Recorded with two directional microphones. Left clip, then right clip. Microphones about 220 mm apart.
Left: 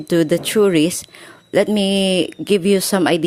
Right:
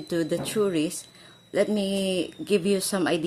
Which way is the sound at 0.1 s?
40° left (ahead or behind).